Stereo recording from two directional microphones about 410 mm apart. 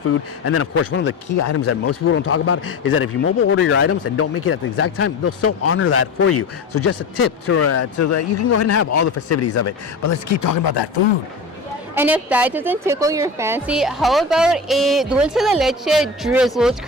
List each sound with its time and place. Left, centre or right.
0.0 s a man's voice: left
11.9 s a woman's voice: centre